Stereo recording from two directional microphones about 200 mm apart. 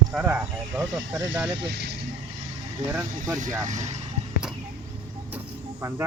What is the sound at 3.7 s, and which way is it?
Speech, 35° right (ahead or behind).